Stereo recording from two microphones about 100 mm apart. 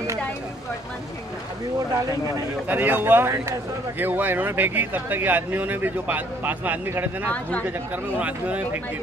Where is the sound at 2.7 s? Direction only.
20° right (ahead or behind).